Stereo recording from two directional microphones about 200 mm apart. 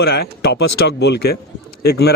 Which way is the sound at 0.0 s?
50° left (ahead or behind).